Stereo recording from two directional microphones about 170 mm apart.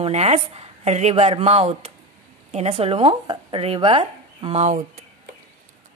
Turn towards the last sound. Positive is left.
turn(degrees=-40)  # may be behind; listen again after turning